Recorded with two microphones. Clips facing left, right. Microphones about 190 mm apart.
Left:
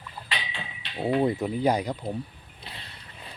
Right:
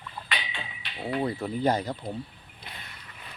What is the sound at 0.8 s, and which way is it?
Speech, 25° left (ahead or behind).